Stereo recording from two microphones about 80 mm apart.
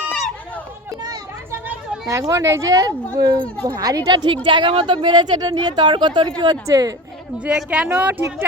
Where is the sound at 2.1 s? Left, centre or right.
Right.